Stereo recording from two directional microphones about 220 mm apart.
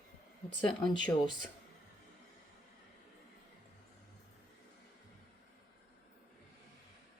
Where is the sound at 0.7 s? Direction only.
20° left (ahead or behind).